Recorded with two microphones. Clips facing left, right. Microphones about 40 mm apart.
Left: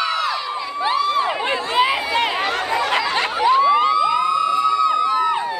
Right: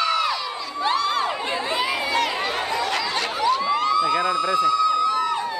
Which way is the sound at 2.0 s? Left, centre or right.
Centre.